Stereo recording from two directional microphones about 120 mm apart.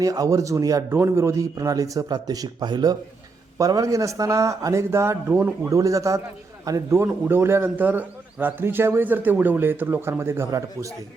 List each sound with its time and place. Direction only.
0.0 s a man's voice: 30° right (ahead or behind); by 5.7 s 15° right (ahead or behind)
5.7 s a man's voice: 25° right (ahead or behind)